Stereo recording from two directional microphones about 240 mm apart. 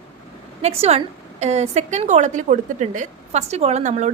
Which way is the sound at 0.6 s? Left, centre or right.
Right.